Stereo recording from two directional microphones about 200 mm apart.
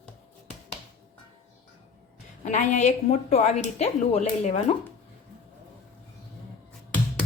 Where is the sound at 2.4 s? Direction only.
35° left (ahead or behind).